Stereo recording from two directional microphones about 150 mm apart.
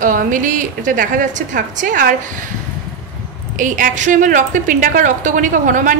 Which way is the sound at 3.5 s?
60° right (ahead or behind).